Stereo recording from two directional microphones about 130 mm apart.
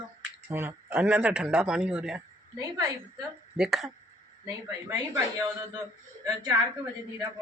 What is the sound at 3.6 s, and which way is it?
Speech, 5° right (ahead or behind).